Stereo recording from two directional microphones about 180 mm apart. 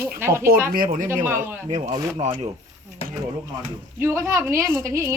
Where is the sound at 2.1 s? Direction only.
35° right (ahead or behind).